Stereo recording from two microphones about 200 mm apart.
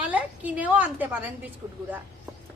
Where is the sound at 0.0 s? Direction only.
5° right (ahead or behind).